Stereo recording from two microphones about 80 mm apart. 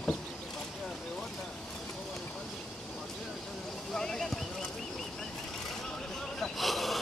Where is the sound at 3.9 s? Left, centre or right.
Centre.